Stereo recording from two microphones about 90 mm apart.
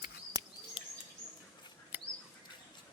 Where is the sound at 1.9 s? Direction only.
20° right (ahead or behind).